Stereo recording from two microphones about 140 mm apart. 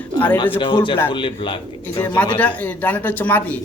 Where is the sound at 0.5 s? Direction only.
40° left (ahead or behind).